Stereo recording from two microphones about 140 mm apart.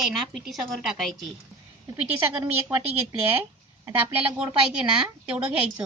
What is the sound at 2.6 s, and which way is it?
Speech, 10° right (ahead or behind).